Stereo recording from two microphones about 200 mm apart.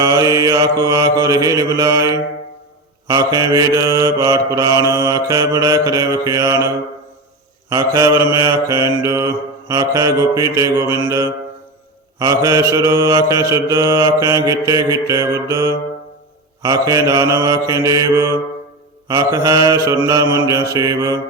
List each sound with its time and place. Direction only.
0.0 s mantra: 15° right (ahead or behind)
7.7 s mantra: 15° right (ahead or behind)
16.6 s mantra: 15° right (ahead or behind)